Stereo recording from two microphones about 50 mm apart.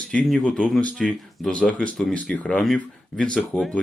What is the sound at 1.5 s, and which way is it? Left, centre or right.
Speech, left.